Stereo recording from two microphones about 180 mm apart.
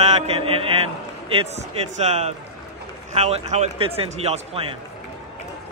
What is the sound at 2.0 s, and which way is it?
A man's voice, 35° right (ahead or behind).